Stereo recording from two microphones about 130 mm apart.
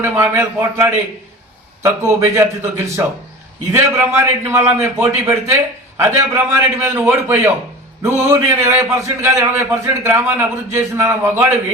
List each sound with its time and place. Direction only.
0.0 s a man's voice: 15° right (ahead or behind)